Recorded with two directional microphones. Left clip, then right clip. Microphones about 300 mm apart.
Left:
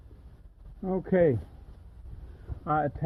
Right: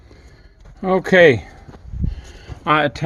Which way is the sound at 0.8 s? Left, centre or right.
Centre.